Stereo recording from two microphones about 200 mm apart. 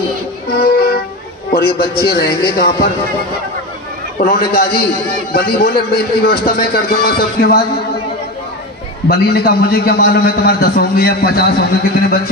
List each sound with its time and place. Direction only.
0.5 s music: 50° left (ahead or behind)
1.5 s a man's voice: 50° left (ahead or behind)
4.2 s a man's voice: 50° left (ahead or behind)
9.1 s a man's voice: 50° left (ahead or behind)